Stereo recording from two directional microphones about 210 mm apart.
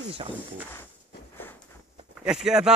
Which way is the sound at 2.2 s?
5° right (ahead or behind).